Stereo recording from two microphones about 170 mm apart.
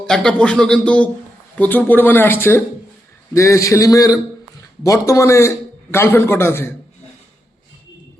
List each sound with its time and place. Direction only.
0.0 s a man's voice: 5° left (ahead or behind)